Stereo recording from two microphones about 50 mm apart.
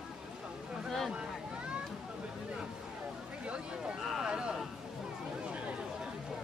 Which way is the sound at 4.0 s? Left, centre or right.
Centre.